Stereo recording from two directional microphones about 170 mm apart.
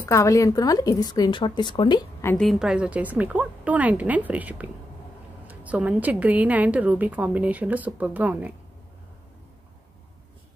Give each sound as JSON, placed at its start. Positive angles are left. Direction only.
{"t": 0.0, "sound": "a woman's voice", "side_deg": 20}
{"t": 2.2, "sound": "a woman's voice", "side_deg": 5}